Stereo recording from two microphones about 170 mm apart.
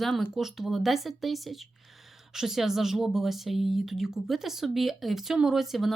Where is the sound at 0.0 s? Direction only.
Centre (ahead or behind).